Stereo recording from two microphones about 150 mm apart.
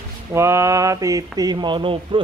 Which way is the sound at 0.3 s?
20° right (ahead or behind).